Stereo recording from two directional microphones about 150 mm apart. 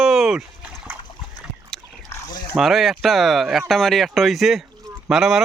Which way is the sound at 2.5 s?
Centre (ahead or behind).